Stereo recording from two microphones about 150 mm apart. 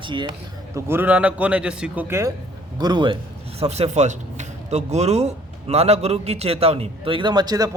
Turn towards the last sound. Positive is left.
turn(degrees=-25)  # may be behind; listen again after turning